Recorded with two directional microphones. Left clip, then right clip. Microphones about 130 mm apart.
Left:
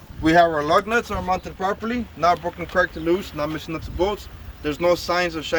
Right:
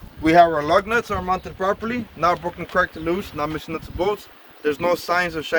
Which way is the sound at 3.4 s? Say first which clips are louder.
Right 1 dB; 45° right (ahead or behind).